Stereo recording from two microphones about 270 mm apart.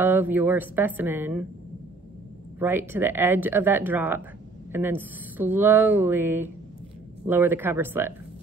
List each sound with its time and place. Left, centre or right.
0.0 s speech: centre
2.6 s speech: centre